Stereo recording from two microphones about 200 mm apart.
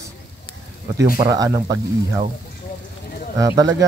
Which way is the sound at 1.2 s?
20° right (ahead or behind).